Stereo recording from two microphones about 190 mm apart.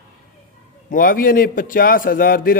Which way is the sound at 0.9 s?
50° left (ahead or behind).